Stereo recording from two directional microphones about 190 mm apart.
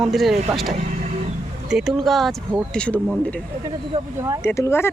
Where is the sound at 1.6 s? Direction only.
Centre (ahead or behind).